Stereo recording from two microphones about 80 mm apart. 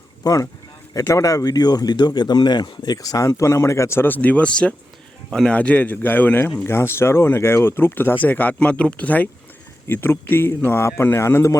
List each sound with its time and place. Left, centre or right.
0.2 s speech: left
1.0 s speech: left
3.2 s speech: left